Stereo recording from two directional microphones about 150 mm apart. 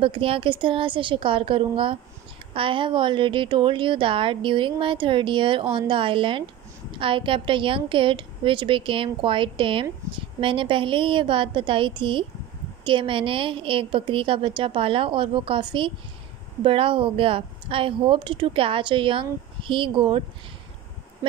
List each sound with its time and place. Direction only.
0.0 s a woman's voice: 35° right (ahead or behind)